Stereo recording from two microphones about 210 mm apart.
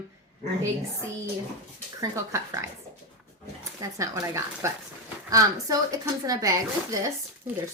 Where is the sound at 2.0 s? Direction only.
15° right (ahead or behind).